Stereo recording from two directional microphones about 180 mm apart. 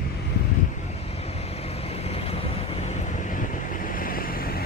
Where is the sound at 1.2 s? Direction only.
35° left (ahead or behind).